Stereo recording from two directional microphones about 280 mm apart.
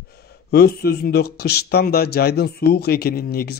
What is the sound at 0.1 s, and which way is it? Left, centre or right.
Speech, left.